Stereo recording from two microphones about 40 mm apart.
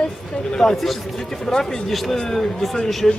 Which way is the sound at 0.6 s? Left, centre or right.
Centre.